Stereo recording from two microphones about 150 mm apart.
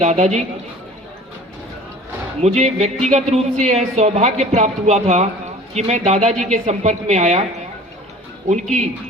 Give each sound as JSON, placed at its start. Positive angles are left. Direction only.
{"t": 0.0, "sound": "speech", "side_deg": -50}
{"t": 2.4, "sound": "speech", "side_deg": -50}
{"t": 8.4, "sound": "speech", "side_deg": -50}